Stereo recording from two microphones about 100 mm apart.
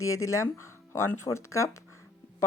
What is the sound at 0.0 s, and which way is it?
Speech, 30° left (ahead or behind).